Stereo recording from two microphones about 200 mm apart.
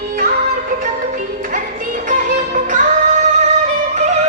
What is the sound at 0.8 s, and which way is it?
Music, 40° right (ahead or behind).